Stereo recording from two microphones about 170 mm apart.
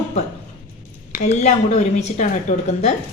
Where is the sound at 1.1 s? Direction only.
50° left (ahead or behind).